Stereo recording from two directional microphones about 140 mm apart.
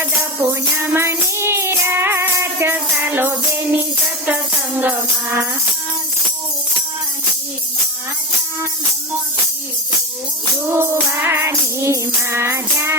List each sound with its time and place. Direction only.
0.8 s music: 20° right (ahead or behind)
10.7 s music: 15° right (ahead or behind)